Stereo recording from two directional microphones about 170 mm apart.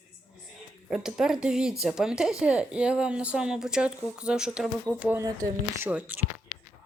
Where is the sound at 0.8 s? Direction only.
5° right (ahead or behind).